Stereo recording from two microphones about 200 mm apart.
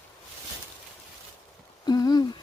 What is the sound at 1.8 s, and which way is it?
Humming, 20° left (ahead or behind).